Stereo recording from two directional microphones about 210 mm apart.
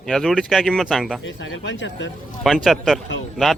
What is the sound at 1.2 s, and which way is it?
Speech, 65° left (ahead or behind).